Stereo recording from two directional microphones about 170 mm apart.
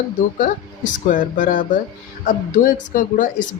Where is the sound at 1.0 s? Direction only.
50° left (ahead or behind).